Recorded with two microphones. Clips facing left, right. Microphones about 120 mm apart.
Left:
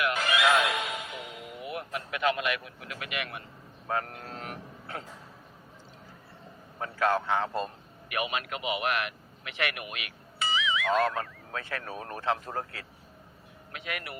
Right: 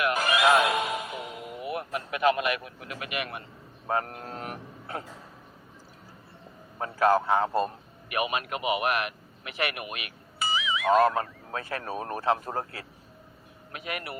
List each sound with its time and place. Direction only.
0.0 s music: 40° right (ahead or behind)
3.8 s speech: 35° right (ahead or behind)
6.7 s a man's voice: 35° right (ahead or behind)